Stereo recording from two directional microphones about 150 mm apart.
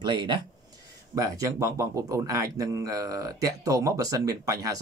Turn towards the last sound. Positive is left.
turn(degrees=-25)  # may be behind; listen again after turning